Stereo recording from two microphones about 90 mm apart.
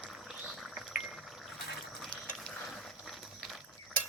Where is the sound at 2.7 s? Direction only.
5° left (ahead or behind).